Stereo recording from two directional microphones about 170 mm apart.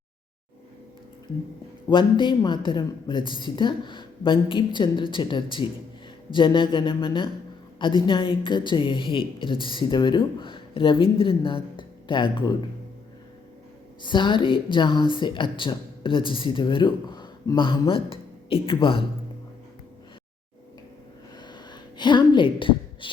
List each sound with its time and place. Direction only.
1.9 s a woman's voice: 30° left (ahead or behind)
14.0 s a woman's voice: 30° left (ahead or behind)
21.3 s a sound: 25° left (ahead or behind)